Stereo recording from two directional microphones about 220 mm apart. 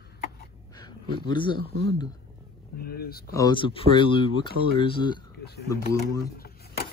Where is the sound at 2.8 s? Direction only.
45° left (ahead or behind).